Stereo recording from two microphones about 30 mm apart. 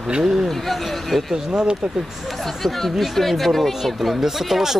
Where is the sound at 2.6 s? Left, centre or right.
Centre.